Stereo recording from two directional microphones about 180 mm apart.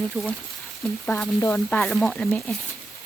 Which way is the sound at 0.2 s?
Centre (ahead or behind).